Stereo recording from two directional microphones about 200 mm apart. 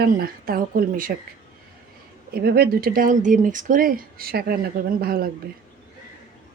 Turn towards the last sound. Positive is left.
turn(degrees=-50)  # may be behind; listen again after turning